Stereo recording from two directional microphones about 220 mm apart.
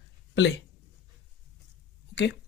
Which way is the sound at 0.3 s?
50° left (ahead or behind).